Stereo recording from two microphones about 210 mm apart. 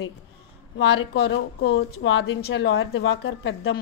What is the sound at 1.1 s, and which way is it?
A woman's voice, 50° left (ahead or behind).